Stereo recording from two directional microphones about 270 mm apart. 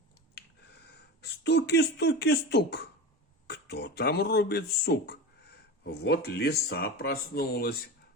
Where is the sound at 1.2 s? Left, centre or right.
Left.